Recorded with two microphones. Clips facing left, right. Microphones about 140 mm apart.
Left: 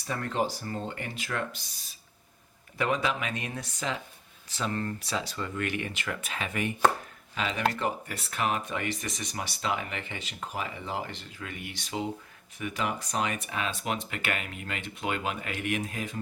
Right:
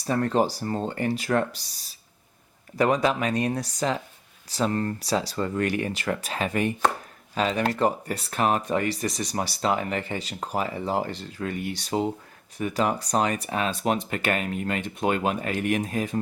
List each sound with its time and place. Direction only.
0.0 s speech: 35° right (ahead or behind)